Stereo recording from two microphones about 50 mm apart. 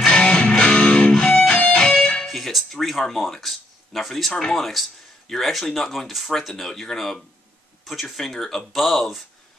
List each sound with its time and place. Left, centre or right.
0.0 s music: centre
0.8 s music: left
1.1 s music: centre
2.2 s speech: centre